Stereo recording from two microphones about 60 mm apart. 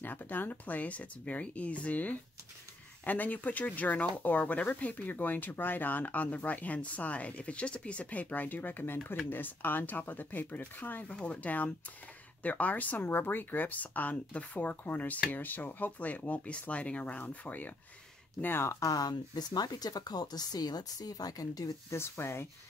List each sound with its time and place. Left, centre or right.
0.0 s speech: left
11.1 s speech: left
18.4 s speech: left
18.7 s speech: left
21.9 s speech: left